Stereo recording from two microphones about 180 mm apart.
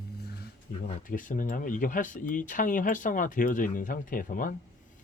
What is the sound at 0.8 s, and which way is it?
Speech, 45° left (ahead or behind).